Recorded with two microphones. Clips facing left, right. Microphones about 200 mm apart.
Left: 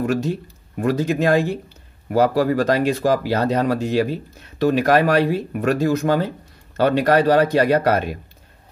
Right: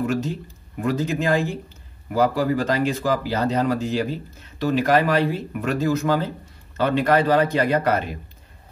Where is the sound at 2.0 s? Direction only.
45° left (ahead or behind).